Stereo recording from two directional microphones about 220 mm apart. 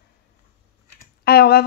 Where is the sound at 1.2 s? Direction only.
45° left (ahead or behind).